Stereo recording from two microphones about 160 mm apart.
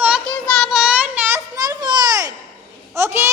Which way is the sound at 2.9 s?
15° right (ahead or behind).